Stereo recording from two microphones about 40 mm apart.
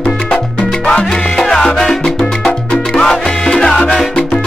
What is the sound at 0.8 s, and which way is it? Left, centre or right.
Salsa music, centre.